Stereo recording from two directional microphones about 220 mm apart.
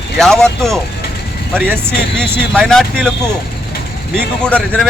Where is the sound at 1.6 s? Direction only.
10° right (ahead or behind).